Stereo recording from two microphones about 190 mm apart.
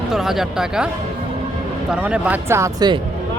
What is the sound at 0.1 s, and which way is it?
Speech, centre (ahead or behind).